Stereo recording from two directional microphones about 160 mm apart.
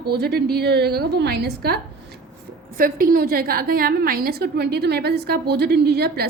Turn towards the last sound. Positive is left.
turn(degrees=-90)